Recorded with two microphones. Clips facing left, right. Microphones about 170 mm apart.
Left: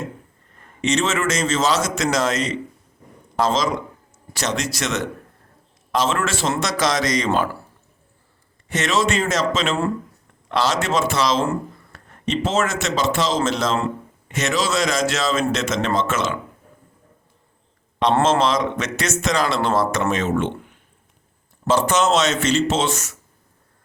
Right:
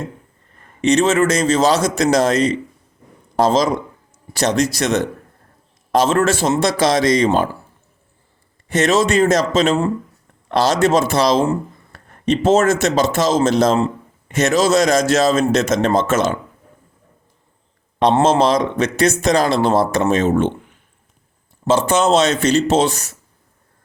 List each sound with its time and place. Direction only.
0.9 s a man's voice: 35° right (ahead or behind)
6.5 s a man's voice: 30° right (ahead or behind)
8.7 s a man's voice: 40° right (ahead or behind)
18.2 s a man's voice: 40° right (ahead or behind)
21.7 s a man's voice: 30° right (ahead or behind)